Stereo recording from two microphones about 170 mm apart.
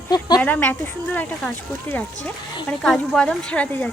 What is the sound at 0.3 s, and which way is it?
A woman's voice, 10° left (ahead or behind).